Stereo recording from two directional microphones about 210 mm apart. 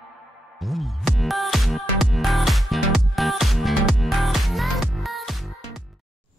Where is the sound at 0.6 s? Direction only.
Centre (ahead or behind).